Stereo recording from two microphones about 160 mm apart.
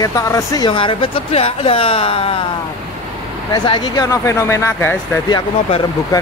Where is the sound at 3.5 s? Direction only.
25° left (ahead or behind).